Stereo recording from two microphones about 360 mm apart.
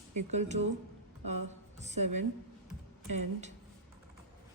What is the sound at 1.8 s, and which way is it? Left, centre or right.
Speech, centre.